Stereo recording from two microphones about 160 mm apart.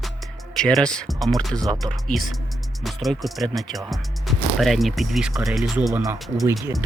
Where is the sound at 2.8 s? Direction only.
Centre (ahead or behind).